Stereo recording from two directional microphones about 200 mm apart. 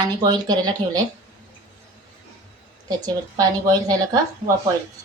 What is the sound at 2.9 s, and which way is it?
Speech, 20° right (ahead or behind).